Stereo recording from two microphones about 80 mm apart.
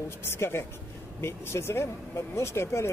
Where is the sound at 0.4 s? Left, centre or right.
Left.